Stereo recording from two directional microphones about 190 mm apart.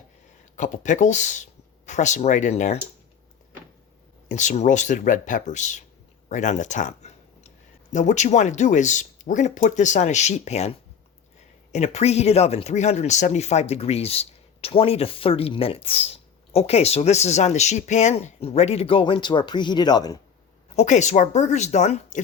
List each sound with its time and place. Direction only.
0.5 s speech: 40° left (ahead or behind)
4.3 s speech: 40° left (ahead or behind)
6.2 s a sound: 40° left (ahead or behind)
7.9 s speech: 40° left (ahead or behind); by 20.1 s 20° left (ahead or behind)
20.7 s speech: 40° left (ahead or behind)